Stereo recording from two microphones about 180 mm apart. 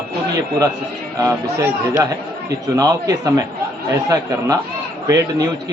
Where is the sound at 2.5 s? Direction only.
20° right (ahead or behind).